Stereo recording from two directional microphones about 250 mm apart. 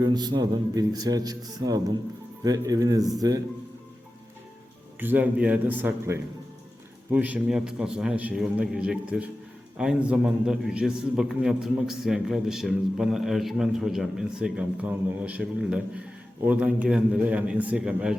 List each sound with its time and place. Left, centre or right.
0.0 s a man's voice: centre
4.9 s a man's voice: centre